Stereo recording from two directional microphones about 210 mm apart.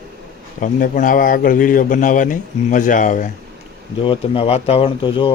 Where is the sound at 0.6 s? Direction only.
40° left (ahead or behind).